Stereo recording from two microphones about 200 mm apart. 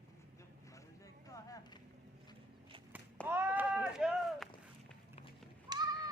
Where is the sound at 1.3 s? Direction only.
15° left (ahead or behind).